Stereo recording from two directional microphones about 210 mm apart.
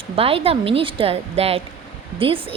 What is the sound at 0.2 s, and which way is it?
A woman's voice, 25° right (ahead or behind).